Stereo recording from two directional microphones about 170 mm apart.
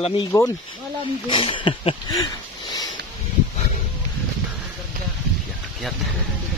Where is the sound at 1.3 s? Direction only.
30° left (ahead or behind).